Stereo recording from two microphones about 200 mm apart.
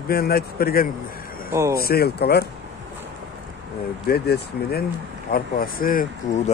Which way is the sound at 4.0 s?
50° left (ahead or behind).